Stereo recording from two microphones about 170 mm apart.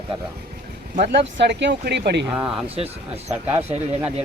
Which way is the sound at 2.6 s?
35° right (ahead or behind).